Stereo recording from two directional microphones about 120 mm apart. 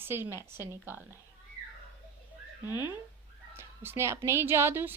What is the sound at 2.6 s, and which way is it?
Speech, 30° left (ahead or behind).